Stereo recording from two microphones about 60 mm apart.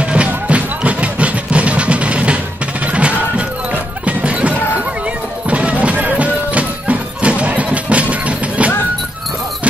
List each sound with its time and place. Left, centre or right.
0.0 s music: centre